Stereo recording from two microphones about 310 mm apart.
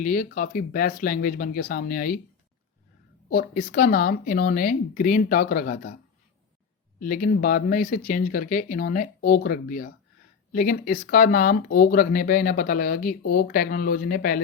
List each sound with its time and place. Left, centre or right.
0.0 s speech: left
3.2 s speech: left
7.0 s speech: left